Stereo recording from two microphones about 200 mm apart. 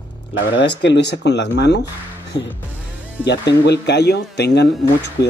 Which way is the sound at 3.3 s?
60° left (ahead or behind).